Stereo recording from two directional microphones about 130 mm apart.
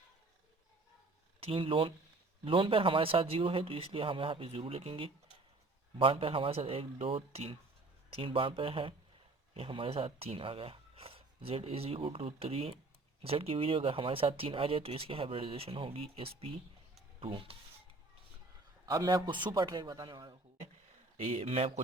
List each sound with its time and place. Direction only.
1.4 s speech: 45° right (ahead or behind)
18.9 s speech: 30° right (ahead or behind)
21.3 s speech: 50° right (ahead or behind)